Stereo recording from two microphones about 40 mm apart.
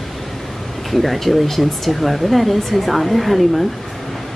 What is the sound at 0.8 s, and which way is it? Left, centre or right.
Speech, centre.